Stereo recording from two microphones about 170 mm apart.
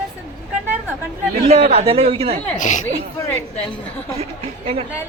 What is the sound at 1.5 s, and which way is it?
Speech, 35° right (ahead or behind).